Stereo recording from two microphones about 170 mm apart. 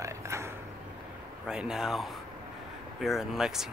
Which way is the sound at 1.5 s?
5° right (ahead or behind).